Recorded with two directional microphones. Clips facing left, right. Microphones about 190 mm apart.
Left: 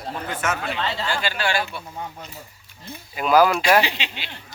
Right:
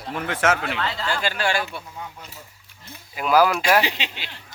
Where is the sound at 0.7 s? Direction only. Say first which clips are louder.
Left 1 dB; 25° left (ahead or behind).